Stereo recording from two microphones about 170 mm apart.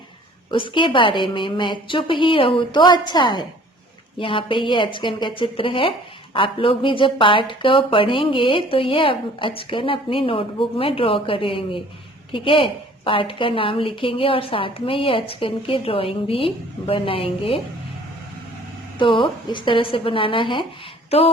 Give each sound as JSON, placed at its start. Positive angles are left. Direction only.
{"t": 0.5, "sound": "a woman's voice", "side_deg": 30}
{"t": 18.9, "sound": "a woman's voice", "side_deg": 30}